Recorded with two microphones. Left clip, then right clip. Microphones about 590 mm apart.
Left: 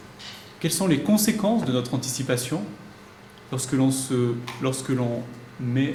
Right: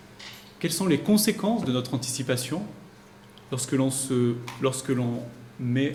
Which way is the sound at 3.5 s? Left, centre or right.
Right.